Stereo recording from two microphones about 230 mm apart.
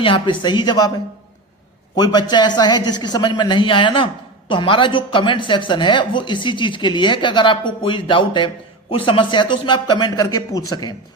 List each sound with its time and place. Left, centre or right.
0.0 s a woman's voice: left
2.3 s a woman's voice: centre